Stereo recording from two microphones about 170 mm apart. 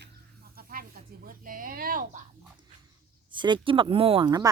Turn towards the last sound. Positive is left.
turn(degrees=-25)  # may be behind; listen again after turning